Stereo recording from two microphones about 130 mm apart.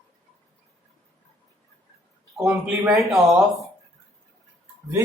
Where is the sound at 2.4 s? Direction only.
5° right (ahead or behind).